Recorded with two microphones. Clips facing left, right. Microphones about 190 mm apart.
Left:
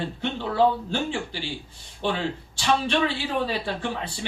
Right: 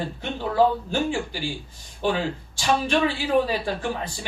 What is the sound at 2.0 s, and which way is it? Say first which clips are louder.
Speech: right 2 dB; 45° right (ahead or behind).